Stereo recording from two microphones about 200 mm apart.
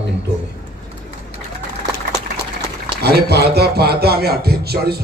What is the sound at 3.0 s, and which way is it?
Speech, 55° right (ahead or behind).